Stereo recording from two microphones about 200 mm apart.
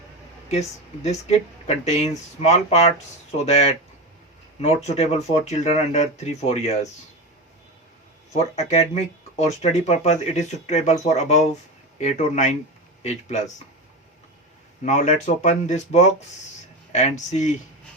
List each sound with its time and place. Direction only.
1.0 s speech: 35° left (ahead or behind)
8.3 s speech: 35° left (ahead or behind)
14.8 s speech: 35° left (ahead or behind)